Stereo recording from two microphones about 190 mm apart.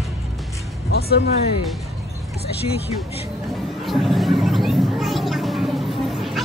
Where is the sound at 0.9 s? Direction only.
60° left (ahead or behind).